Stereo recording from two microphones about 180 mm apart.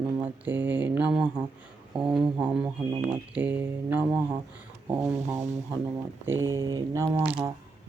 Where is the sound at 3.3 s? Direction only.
10° right (ahead or behind).